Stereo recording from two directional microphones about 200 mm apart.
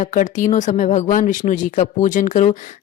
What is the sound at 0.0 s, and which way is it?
A woman's voice, 40° left (ahead or behind).